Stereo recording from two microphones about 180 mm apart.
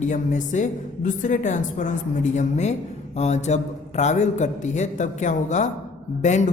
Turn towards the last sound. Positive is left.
turn(degrees=40)  # may be behind; listen again after turning